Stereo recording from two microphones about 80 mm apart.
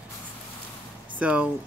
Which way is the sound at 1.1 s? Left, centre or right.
Centre.